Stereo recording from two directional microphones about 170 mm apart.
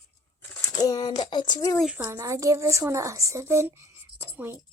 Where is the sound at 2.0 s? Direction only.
20° right (ahead or behind).